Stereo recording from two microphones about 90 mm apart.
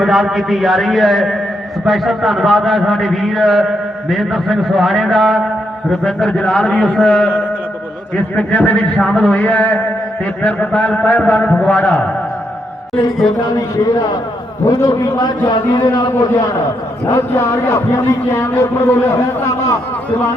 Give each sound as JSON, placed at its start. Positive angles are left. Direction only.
{"t": 0.0, "sound": "a man's voice", "side_deg": 0}
{"t": 13.4, "sound": "a man's voice", "side_deg": 40}
{"t": 17.1, "sound": "a man's voice", "side_deg": 30}